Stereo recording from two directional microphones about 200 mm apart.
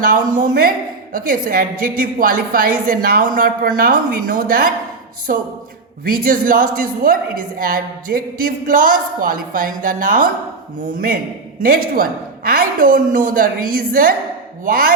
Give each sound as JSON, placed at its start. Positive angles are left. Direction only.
{"t": 0.0, "sound": "a woman's voice", "side_deg": -45}
{"t": 11.6, "sound": "a woman's voice", "side_deg": -45}